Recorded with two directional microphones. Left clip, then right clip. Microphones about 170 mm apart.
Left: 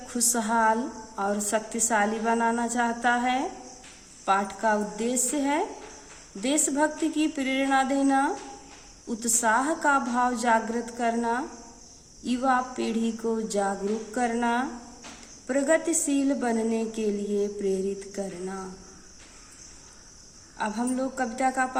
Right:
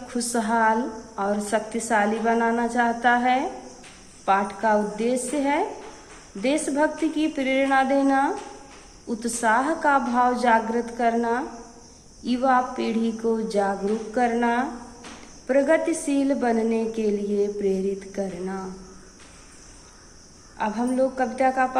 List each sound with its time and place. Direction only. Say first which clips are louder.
0.1 s a woman's voice: right 2 dB; 30° left (ahead or behind)
20.6 s a woman's voice: right 6 dB; 30° left (ahead or behind)